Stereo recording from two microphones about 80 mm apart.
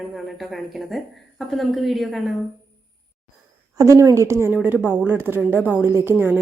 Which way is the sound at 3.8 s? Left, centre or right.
Right.